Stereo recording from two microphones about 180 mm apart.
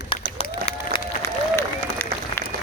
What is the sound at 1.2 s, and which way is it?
Applause, 15° left (ahead or behind).